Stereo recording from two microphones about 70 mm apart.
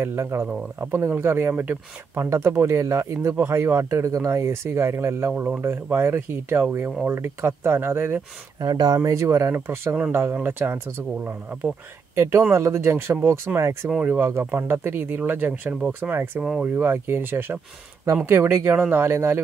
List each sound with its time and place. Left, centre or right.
0.0 s speech: right
2.2 s speech: right
4.1 s speech: right
8.5 s speech: right
12.2 s speech: right